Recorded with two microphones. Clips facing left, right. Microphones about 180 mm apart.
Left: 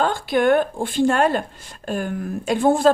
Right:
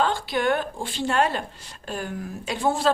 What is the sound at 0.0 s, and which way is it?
A woman's voice, 50° left (ahead or behind).